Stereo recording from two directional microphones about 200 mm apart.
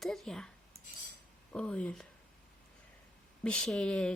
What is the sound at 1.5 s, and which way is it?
Speech, 5° left (ahead or behind).